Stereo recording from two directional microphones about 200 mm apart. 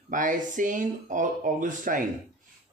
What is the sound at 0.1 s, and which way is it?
Speech, 40° right (ahead or behind).